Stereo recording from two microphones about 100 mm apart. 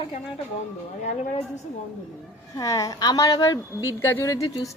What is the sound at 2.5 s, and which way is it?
A woman's voice, 35° left (ahead or behind).